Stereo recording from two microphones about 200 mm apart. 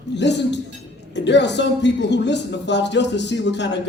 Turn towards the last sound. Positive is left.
turn(degrees=60)  # may be behind; listen again after turning